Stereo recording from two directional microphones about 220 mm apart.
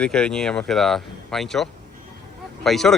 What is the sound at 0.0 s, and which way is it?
A man's voice, 5° left (ahead or behind).